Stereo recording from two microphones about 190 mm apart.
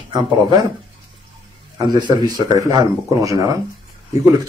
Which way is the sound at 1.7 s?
25° right (ahead or behind).